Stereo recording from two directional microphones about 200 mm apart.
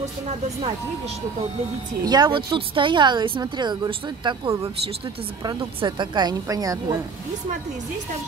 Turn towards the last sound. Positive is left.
turn(degrees=-20)  # may be behind; listen again after turning